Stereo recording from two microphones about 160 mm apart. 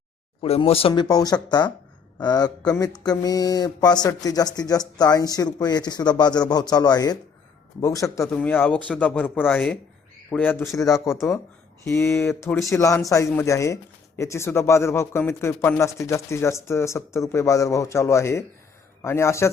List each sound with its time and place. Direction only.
0.4 s speech: 40° left (ahead or behind)
1.0 s speech: 25° left (ahead or behind)